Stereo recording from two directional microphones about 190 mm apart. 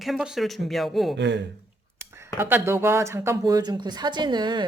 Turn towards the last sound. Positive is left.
turn(degrees=-20)  # may be behind; listen again after turning